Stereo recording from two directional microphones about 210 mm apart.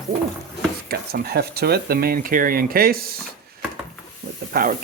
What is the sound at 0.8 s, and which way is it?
Speech, 45° right (ahead or behind).